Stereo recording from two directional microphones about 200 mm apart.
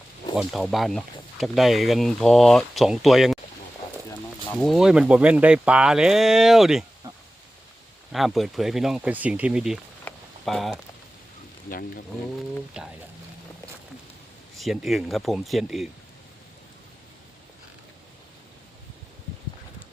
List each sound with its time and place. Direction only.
0.3 s speech: centre (ahead or behind)
4.5 s speech: centre (ahead or behind)
8.1 s speech: centre (ahead or behind)
10.0 s a sound: 5° left (ahead or behind)
11.7 s speech: 50° left (ahead or behind)
12.8 s speech: 5° right (ahead or behind)
14.5 s speech: centre (ahead or behind)